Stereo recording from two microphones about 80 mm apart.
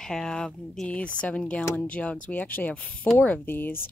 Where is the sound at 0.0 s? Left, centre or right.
Centre.